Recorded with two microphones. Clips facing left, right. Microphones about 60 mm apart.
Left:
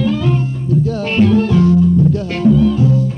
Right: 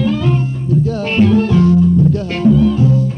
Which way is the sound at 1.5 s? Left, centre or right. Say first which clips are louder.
Even; right.